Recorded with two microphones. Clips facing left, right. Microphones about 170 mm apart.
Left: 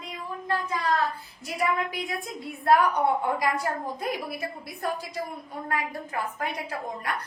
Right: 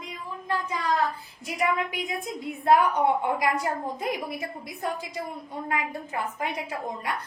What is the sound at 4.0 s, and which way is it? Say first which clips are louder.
Speech: right 1 dB; 20° right (ahead or behind).